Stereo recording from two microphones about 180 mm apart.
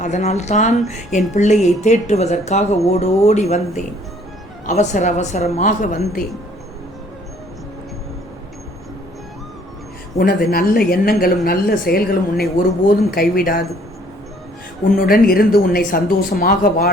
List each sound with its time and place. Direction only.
0.0 s speech: 40° left (ahead or behind)
4.6 s speech: 40° left (ahead or behind)
10.2 s speech: 55° left (ahead or behind)
14.9 s speech: 55° left (ahead or behind)